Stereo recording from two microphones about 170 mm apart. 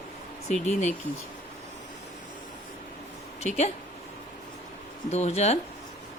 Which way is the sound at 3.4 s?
40° left (ahead or behind).